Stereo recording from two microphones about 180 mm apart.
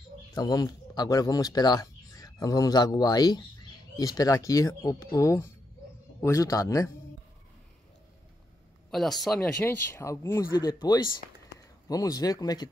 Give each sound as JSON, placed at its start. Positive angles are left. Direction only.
{"t": 0.3, "sound": "speech", "side_deg": 20}
{"t": 8.9, "sound": "speech", "side_deg": 0}
{"t": 9.7, "sound": "speech", "side_deg": 15}